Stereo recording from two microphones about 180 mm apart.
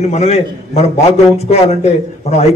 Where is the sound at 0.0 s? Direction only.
35° left (ahead or behind).